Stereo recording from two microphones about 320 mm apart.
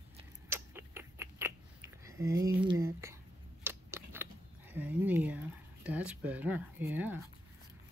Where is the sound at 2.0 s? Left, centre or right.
Centre.